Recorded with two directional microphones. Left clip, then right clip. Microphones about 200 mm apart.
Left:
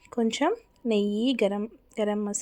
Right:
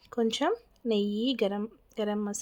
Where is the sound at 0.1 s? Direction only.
5° left (ahead or behind).